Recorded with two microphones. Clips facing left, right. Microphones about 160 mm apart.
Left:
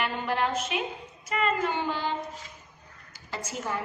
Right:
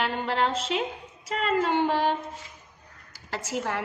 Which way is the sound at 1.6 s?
75° right (ahead or behind).